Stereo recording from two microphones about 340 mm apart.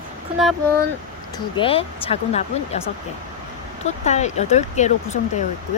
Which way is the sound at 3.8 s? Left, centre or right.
Centre.